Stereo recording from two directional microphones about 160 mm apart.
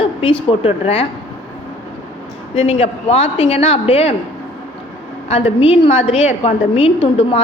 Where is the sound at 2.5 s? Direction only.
40° left (ahead or behind).